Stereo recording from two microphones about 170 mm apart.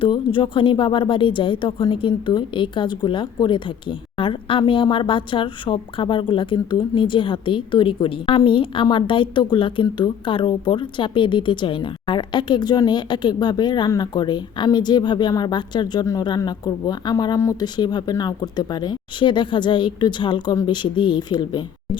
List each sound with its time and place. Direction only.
0.0 s a woman's voice: 30° left (ahead or behind)